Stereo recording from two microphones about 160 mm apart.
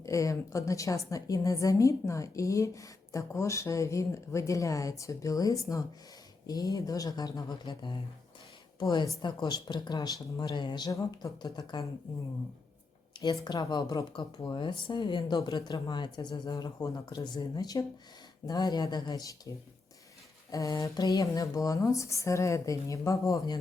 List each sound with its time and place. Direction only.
0.0 s a woman's voice: 20° left (ahead or behind)
13.4 s a woman's voice: 25° left (ahead or behind)
20.5 s a woman's voice: 20° left (ahead or behind)